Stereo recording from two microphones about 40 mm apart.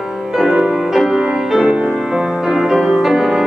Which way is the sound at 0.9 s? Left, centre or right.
Centre.